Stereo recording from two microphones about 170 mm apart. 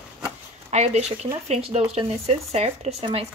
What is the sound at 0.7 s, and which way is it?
Speech, 40° right (ahead or behind).